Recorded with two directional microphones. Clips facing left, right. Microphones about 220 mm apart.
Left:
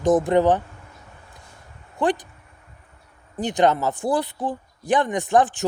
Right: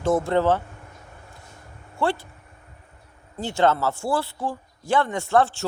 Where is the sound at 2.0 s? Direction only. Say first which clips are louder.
Left 3 dB; 15° left (ahead or behind).